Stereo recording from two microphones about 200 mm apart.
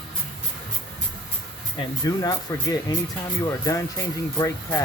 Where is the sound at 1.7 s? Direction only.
20° left (ahead or behind).